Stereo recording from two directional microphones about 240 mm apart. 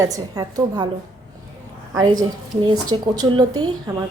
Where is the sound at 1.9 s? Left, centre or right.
Centre.